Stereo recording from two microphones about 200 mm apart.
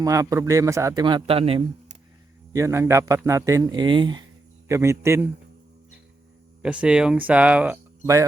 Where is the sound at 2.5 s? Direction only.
15° right (ahead or behind).